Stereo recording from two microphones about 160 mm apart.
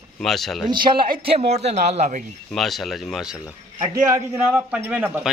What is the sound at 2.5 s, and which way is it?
Speech, centre (ahead or behind).